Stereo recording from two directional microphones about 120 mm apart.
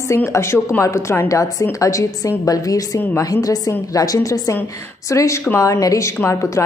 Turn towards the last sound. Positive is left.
turn(degrees=25)  # may be behind; listen again after turning